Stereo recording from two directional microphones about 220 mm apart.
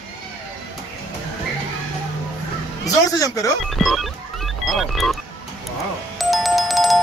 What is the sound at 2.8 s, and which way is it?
Speech, 15° left (ahead or behind).